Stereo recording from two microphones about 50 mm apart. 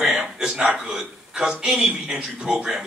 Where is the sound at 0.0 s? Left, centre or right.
Centre.